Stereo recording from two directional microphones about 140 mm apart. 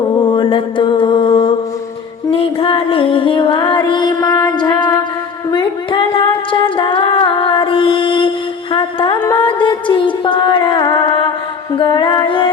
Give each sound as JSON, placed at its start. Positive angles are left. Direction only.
{"t": 0.3, "sound": "mantra", "side_deg": 35}
{"t": 2.3, "sound": "music", "side_deg": 40}
{"t": 4.4, "sound": "a sound", "side_deg": 30}
{"t": 6.5, "sound": "music", "side_deg": 35}